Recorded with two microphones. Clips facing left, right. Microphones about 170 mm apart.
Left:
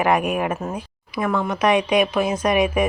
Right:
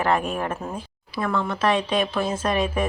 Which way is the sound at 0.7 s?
15° left (ahead or behind).